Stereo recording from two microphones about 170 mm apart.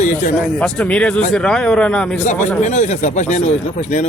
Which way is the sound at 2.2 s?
45° left (ahead or behind).